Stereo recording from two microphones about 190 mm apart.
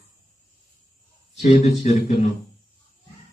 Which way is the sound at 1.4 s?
35° left (ahead or behind).